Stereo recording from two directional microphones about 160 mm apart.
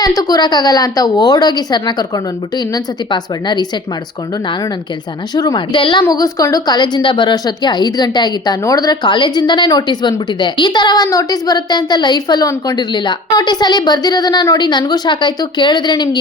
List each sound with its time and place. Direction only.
0.2 s a woman's voice: 25° left (ahead or behind)
5.3 s a woman's voice: 25° left (ahead or behind)